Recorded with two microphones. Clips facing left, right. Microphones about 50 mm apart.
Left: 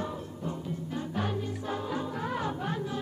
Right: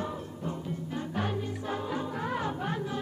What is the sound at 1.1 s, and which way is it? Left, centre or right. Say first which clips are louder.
Music: even; right.